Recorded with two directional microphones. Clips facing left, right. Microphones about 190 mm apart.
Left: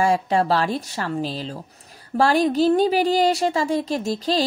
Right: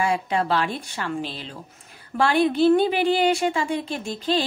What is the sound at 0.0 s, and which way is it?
A woman's voice, 40° left (ahead or behind).